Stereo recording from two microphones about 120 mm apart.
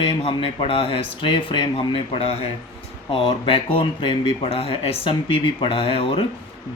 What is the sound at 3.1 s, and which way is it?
Speech, 45° left (ahead or behind).